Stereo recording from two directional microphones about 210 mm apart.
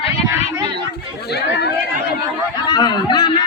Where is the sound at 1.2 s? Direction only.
50° left (ahead or behind).